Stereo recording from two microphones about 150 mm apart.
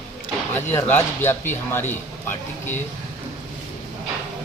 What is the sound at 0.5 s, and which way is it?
Speech, 15° left (ahead or behind).